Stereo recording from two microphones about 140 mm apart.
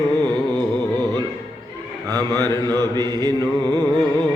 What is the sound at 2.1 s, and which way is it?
Music, 25° right (ahead or behind).